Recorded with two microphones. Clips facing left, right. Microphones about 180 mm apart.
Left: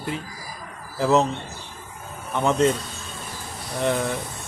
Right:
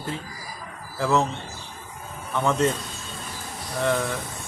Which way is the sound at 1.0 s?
20° left (ahead or behind).